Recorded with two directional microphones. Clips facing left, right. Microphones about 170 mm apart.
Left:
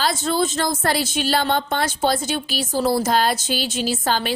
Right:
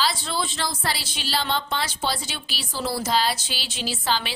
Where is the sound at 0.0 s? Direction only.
45° left (ahead or behind).